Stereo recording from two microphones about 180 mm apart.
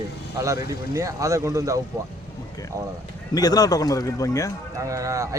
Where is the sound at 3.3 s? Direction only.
20° left (ahead or behind).